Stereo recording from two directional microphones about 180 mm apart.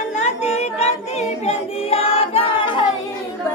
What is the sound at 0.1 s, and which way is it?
Choir, 40° left (ahead or behind).